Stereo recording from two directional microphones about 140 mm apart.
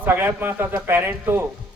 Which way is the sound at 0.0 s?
15° right (ahead or behind).